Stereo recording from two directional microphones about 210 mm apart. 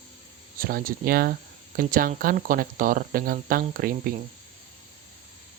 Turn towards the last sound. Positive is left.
turn(degrees=-40)  # may be behind; listen again after turning